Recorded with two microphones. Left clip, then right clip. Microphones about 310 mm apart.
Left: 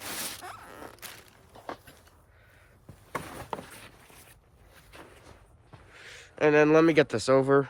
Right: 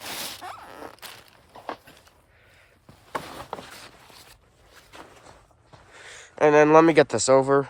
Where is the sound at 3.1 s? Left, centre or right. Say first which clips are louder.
Right 3 dB; centre.